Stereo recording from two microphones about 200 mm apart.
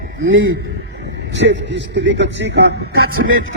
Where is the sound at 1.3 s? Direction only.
65° right (ahead or behind).